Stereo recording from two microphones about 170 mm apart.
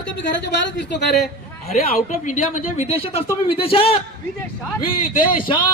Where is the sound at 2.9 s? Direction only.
35° left (ahead or behind).